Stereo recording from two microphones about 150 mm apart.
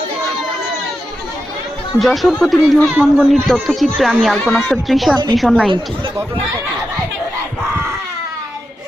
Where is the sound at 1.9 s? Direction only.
Centre (ahead or behind).